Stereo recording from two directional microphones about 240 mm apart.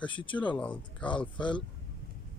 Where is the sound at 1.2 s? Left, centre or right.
Centre.